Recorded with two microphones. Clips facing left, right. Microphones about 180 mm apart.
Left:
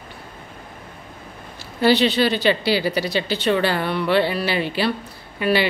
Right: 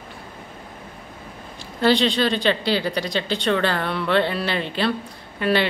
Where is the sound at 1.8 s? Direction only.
5° left (ahead or behind).